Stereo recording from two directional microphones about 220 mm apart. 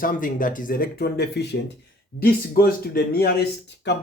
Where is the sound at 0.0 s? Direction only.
40° left (ahead or behind).